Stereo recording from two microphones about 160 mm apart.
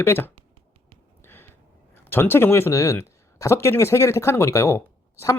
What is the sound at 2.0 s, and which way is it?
Speech, 15° left (ahead or behind).